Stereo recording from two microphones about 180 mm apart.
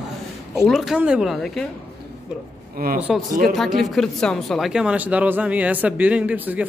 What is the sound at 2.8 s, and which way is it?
Speech, 55° right (ahead or behind).